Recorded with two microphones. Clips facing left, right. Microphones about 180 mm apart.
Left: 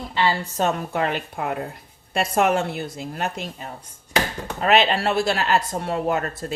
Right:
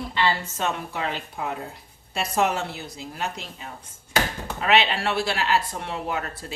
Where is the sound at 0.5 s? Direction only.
45° left (ahead or behind).